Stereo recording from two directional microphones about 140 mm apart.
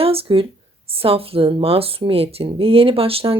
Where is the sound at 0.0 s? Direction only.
45° right (ahead or behind).